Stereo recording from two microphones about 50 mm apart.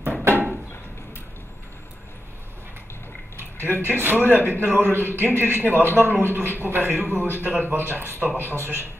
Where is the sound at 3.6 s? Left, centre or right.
Right.